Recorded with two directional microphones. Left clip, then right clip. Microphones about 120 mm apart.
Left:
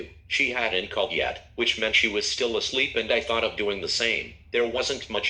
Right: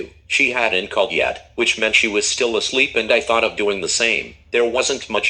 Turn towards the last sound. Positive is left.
turn(degrees=-40)  # may be behind; listen again after turning